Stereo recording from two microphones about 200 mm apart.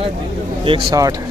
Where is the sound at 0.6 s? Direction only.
20° right (ahead or behind).